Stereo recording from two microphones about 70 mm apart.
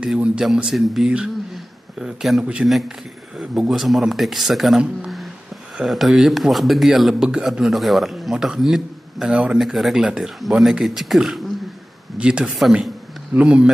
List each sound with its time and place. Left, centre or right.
0.0 s speech: centre
1.5 s a sound: centre
2.4 s speech: centre
9.6 s speech: centre
12.2 s speech: centre